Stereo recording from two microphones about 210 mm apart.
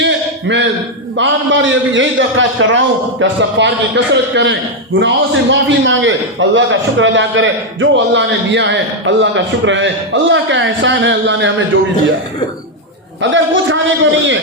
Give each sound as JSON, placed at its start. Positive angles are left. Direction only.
{"t": 0.0, "sound": "a sound", "side_deg": -55}
{"t": 1.1, "sound": "a man's voice", "side_deg": -60}
{"t": 13.3, "sound": "a man's voice", "side_deg": -65}